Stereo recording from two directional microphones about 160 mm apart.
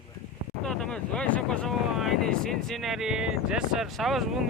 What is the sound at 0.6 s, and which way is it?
Speech, 5° left (ahead or behind).